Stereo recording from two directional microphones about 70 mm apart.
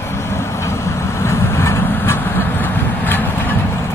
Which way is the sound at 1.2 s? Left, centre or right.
Left.